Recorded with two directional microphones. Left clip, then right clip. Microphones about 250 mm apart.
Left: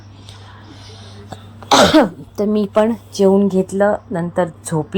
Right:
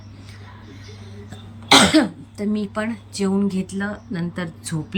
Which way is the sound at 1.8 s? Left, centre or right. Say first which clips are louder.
Left 6 dB; left.